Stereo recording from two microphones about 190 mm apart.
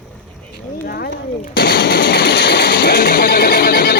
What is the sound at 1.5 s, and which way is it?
Machine gun, 55° left (ahead or behind).